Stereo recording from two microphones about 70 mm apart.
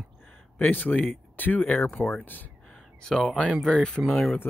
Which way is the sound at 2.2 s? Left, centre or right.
Left.